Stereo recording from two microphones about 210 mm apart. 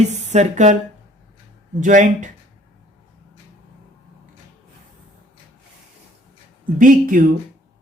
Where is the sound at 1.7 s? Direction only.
35° right (ahead or behind).